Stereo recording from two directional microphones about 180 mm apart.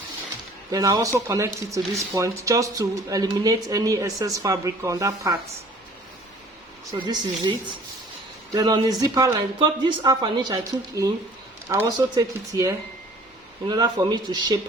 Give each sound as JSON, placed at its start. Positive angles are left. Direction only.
{"t": 0.7, "sound": "speech", "side_deg": -20}
{"t": 7.0, "sound": "a woman's voice", "side_deg": -25}
{"t": 8.5, "sound": "a woman's voice", "side_deg": -20}